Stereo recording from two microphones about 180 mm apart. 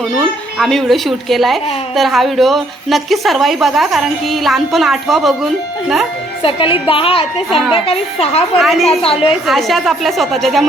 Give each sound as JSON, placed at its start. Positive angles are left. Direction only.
{"t": 0.6, "sound": "a woman's voice", "side_deg": 0}
{"t": 6.4, "sound": "a woman's voice", "side_deg": 30}
{"t": 7.5, "sound": "a woman's voice", "side_deg": 0}
{"t": 7.9, "sound": "a woman's voice", "side_deg": 35}
{"t": 8.5, "sound": "a woman's voice", "side_deg": 0}
{"t": 9.0, "sound": "a woman's voice", "side_deg": 30}
{"t": 9.5, "sound": "a woman's voice", "side_deg": 0}